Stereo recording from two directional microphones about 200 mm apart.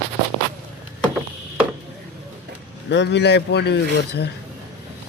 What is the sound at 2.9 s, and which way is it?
Speech, 60° left (ahead or behind).